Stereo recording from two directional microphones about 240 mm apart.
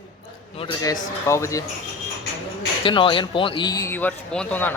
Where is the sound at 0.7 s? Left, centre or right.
Centre.